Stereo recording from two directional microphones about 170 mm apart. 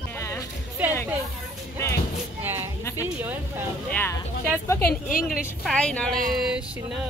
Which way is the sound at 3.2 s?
10° right (ahead or behind).